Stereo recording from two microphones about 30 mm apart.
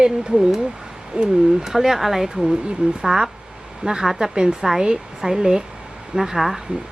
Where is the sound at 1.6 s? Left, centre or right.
Centre.